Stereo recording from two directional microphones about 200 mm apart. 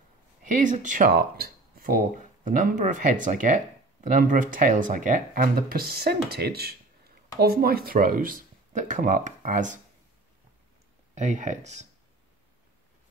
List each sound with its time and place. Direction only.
0.5 s speech: 40° right (ahead or behind)
11.1 s speech: 35° right (ahead or behind)